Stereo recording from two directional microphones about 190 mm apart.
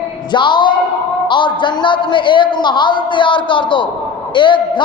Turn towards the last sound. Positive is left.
turn(degrees=25)  # may be behind; listen again after turning